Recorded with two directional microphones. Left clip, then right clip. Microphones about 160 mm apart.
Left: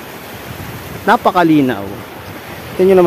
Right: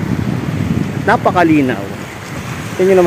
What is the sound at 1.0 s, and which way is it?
Speech, 15° left (ahead or behind).